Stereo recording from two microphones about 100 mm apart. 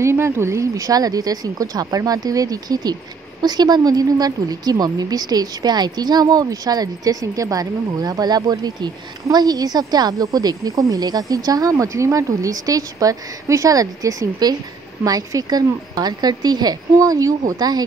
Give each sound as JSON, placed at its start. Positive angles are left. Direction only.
{"t": 0.0, "sound": "speech", "side_deg": -25}